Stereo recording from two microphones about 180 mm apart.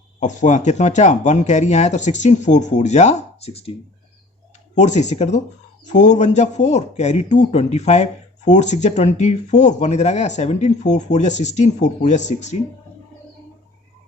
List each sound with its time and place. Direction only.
0.2 s speech: 45° left (ahead or behind)
4.7 s speech: 40° left (ahead or behind)